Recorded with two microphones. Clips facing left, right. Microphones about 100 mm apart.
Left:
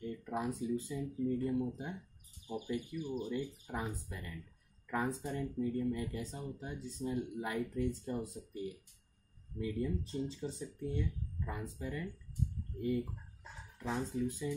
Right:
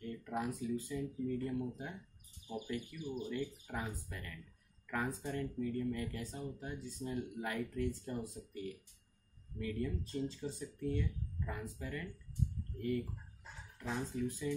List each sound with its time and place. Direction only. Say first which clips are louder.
0.0 s a sound: left 1 dB; 20° left (ahead or behind)
0.6 s speech: left 1 dB; 20° left (ahead or behind)
14.0 s speech: left 2 dB; 20° left (ahead or behind)